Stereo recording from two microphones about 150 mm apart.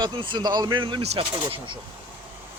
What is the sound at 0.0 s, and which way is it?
Speech, 35° right (ahead or behind).